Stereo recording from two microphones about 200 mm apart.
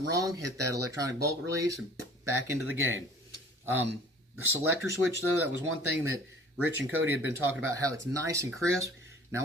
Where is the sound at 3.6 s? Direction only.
10° right (ahead or behind).